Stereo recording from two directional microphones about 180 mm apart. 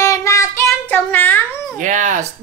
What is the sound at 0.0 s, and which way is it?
Child singing, 15° left (ahead or behind).